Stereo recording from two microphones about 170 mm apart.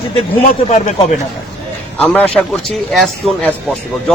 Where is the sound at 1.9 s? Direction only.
10° left (ahead or behind).